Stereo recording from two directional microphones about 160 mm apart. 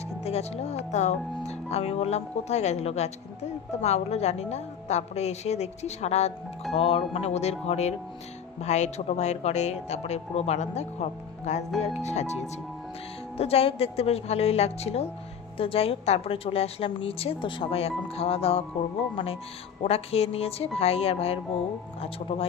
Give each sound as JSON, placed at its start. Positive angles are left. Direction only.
{"t": 0.3, "sound": "a woman's voice", "side_deg": 40}